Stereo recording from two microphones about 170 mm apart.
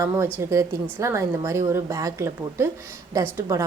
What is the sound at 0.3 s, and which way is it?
A woman's voice, 15° right (ahead or behind).